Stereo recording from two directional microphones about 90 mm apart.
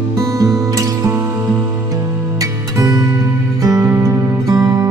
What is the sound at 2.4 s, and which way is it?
Music, 45° right (ahead or behind).